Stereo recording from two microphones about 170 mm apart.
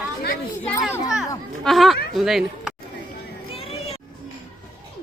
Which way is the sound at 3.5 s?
35° left (ahead or behind).